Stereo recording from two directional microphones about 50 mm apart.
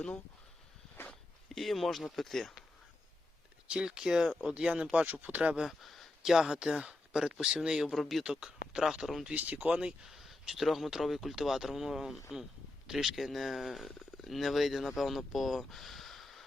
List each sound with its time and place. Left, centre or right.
1.5 s speech: centre
3.7 s speech: centre
5.8 s speech: centre
7.9 s speech: centre
8.2 s speech: centre
9.3 s speech: right
10.1 s speech: centre